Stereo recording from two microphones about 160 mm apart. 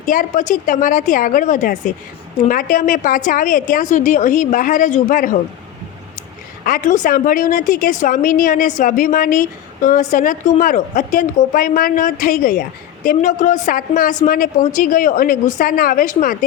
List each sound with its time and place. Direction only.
0.0 s a woman's voice: 55° left (ahead or behind)
6.7 s a woman's voice: 60° left (ahead or behind)